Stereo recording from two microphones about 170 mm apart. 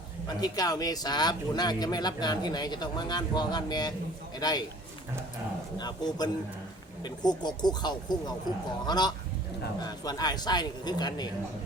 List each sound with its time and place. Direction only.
0.4 s speech: 20° left (ahead or behind)
5.7 s speech: 25° left (ahead or behind)